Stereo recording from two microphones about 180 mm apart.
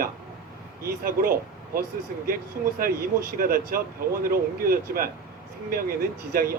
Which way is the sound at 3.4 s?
55° right (ahead or behind).